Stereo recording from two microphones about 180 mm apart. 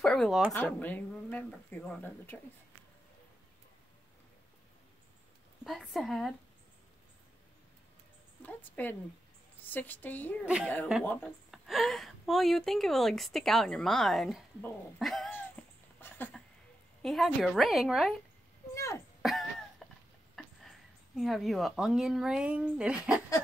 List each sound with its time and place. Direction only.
0.0 s a sound: centre (ahead or behind)
0.5 s speech: 10° left (ahead or behind)
5.6 s a woman's voice: centre (ahead or behind)
8.4 s speech: 10° left (ahead or behind)
10.4 s a woman's voice: 5° right (ahead or behind)
11.1 s speech: 10° left (ahead or behind)
11.5 s a woman's voice: centre (ahead or behind)
15.6 s a sound: 5° left (ahead or behind)
17.0 s a woman's voice: centre (ahead or behind)
18.8 s throat clearing: 15° left (ahead or behind)
19.2 s a sound: centre (ahead or behind)
21.2 s a woman's voice: centre (ahead or behind)